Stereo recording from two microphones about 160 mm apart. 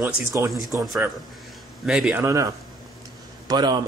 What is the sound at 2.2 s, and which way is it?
Speech, 20° right (ahead or behind).